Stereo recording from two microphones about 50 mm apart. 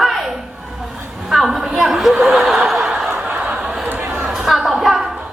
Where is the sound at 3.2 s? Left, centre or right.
Centre.